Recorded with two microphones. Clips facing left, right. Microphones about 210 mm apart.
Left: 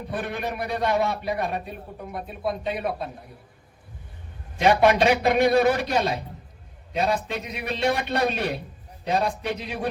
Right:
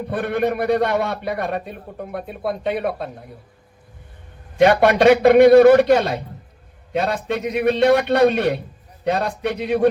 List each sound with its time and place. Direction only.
0.1 s a man's voice: 60° right (ahead or behind)
4.5 s a man's voice: 60° right (ahead or behind)